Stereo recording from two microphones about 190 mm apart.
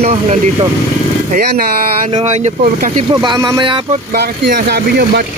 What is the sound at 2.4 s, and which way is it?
Speech, 40° right (ahead or behind).